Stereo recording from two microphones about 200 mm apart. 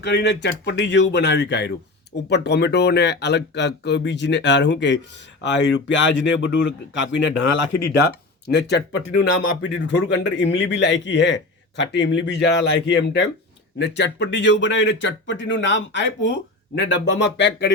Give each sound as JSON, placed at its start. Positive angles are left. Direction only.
{"t": 0.0, "sound": "speech", "side_deg": 55}